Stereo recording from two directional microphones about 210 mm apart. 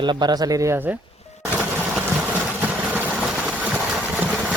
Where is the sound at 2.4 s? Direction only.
5° right (ahead or behind).